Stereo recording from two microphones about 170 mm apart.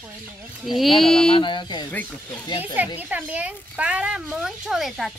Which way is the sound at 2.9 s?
10° right (ahead or behind).